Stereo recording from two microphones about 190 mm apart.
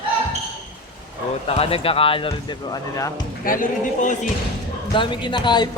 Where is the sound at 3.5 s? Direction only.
45° left (ahead or behind).